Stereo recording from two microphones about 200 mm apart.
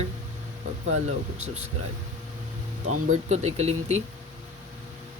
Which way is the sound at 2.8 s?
90° right.